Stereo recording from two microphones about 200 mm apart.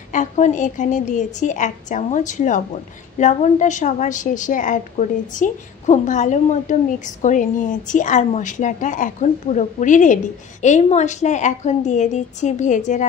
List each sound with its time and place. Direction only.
0.1 s a woman's voice: 40° left (ahead or behind)